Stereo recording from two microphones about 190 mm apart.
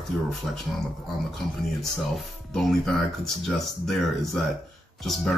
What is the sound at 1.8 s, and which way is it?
Speech, centre (ahead or behind).